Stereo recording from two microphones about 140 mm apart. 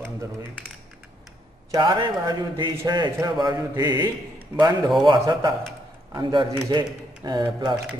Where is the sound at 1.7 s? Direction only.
35° right (ahead or behind).